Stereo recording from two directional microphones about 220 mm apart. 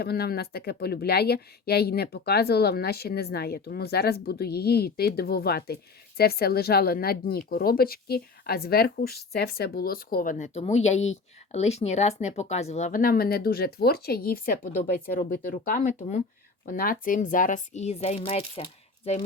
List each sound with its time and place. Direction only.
0.0 s a woman's voice: 45° left (ahead or behind); by 19.2 s 25° left (ahead or behind)